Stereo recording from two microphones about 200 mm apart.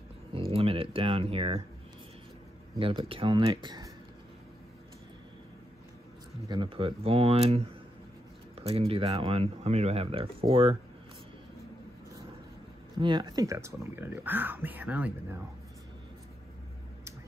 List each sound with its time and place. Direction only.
0.5 s speech: 30° right (ahead or behind)
2.7 s speech: 25° right (ahead or behind)
6.4 s speech: 25° right (ahead or behind)
13.0 s speech: 20° right (ahead or behind)